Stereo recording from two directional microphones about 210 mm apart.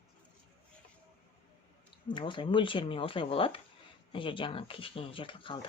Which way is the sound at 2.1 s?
25° left (ahead or behind).